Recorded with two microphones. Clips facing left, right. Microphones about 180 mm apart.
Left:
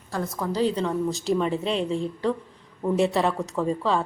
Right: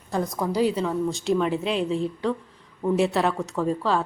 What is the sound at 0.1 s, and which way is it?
A woman's voice, 15° right (ahead or behind).